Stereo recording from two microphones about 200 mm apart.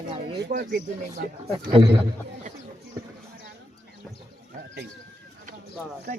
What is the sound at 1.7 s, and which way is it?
Speech, 20° right (ahead or behind).